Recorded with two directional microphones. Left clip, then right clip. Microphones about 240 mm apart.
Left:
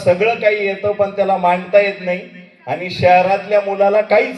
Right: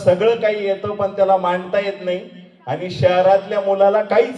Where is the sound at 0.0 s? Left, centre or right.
Left.